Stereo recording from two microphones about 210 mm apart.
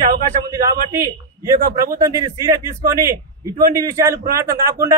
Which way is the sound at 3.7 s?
15° right (ahead or behind).